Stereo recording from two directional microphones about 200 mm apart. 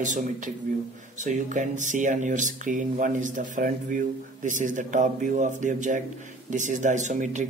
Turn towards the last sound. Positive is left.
turn(degrees=-40)  # may be behind; listen again after turning